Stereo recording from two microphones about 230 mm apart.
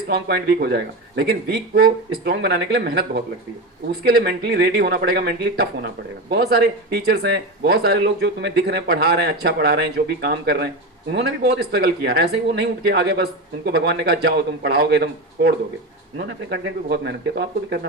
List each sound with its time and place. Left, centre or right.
0.1 s speech: right